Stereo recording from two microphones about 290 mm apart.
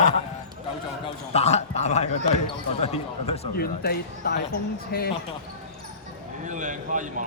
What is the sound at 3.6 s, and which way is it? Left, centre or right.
Speech, left.